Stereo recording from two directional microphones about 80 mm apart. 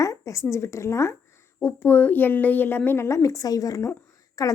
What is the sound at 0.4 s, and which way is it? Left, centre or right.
A woman's voice, left.